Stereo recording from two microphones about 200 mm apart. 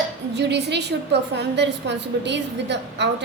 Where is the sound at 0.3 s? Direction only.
60° right (ahead or behind).